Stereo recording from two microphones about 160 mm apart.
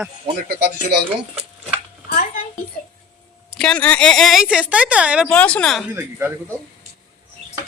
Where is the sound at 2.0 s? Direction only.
65° left (ahead or behind).